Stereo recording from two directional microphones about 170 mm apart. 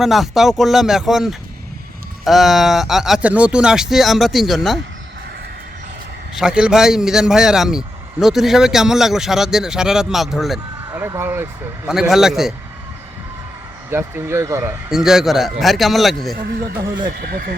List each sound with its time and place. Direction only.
0.0 s a man's voice: centre (ahead or behind)
6.3 s a man's voice: 5° right (ahead or behind)
10.9 s speech: 15° right (ahead or behind)
11.9 s a man's voice: 5° right (ahead or behind)
13.9 s speech: 15° right (ahead or behind)
14.8 s a man's voice: 5° right (ahead or behind)
17.2 s speech: 60° right (ahead or behind)